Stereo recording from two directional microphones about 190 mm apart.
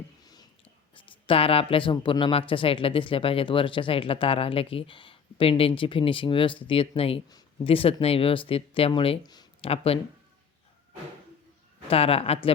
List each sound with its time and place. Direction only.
0.2 s speech: 20° left (ahead or behind)
11.9 s a woman's voice: 30° left (ahead or behind)